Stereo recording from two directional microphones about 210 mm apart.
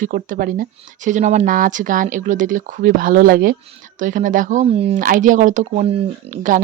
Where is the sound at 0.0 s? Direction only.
40° right (ahead or behind).